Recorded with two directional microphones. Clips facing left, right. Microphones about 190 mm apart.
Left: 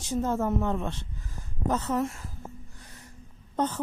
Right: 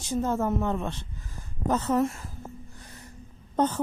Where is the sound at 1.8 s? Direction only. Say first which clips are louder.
Right 6 dB; 50° right (ahead or behind).